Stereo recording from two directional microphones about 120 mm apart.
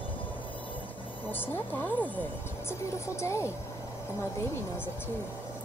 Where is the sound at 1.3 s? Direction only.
15° left (ahead or behind).